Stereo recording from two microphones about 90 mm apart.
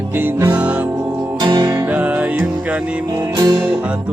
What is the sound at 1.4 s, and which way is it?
Music, 45° right (ahead or behind).